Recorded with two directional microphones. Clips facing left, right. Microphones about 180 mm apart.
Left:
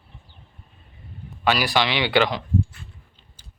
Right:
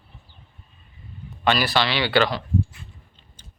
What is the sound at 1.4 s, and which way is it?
Speech, 10° left (ahead or behind).